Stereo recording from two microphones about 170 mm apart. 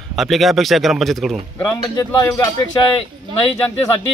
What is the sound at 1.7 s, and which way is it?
Speech, 15° left (ahead or behind).